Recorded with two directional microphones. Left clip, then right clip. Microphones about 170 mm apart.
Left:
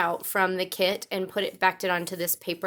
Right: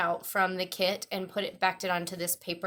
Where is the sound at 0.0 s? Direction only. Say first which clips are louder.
Left 3 dB; 35° left (ahead or behind).